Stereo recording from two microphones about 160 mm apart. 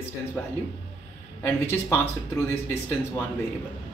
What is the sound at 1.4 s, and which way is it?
Speech, 15° left (ahead or behind).